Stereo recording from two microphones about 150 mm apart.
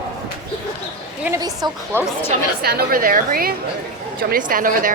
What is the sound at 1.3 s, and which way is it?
Speech, 25° right (ahead or behind).